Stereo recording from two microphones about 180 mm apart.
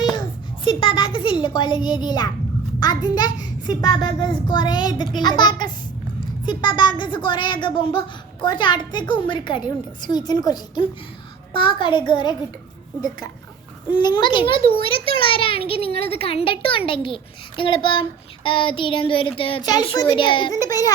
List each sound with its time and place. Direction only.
0.6 s a woman's voice: 30° left (ahead or behind)